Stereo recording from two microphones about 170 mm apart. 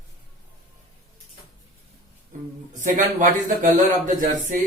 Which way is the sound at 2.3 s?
50° right (ahead or behind).